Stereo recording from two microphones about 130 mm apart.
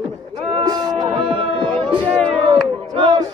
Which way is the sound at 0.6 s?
30° right (ahead or behind).